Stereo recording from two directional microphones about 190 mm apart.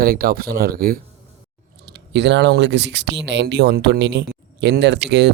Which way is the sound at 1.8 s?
70° right (ahead or behind).